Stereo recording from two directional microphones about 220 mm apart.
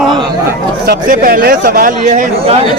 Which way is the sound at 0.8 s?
40° right (ahead or behind).